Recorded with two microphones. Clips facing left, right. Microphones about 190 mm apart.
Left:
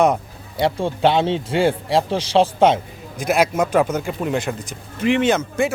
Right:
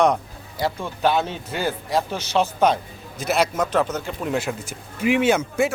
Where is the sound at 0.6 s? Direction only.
30° left (ahead or behind).